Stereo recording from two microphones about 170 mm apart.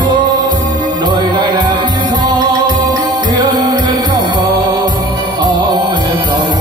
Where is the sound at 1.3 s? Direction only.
25° right (ahead or behind).